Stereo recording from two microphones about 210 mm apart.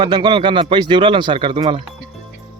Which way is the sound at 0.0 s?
20° right (ahead or behind).